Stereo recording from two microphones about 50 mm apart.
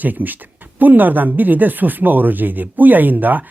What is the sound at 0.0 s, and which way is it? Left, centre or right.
Speech, right.